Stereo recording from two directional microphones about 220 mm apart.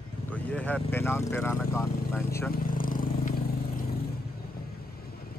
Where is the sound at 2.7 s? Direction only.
40° left (ahead or behind).